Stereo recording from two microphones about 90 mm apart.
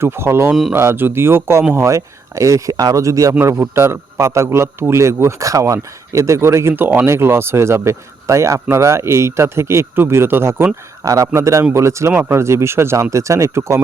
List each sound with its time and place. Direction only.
0.0 s a man's voice: 30° right (ahead or behind)
11.0 s a man's voice: 40° right (ahead or behind)